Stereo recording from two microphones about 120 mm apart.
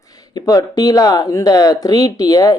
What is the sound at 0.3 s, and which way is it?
Speech, 30° left (ahead or behind).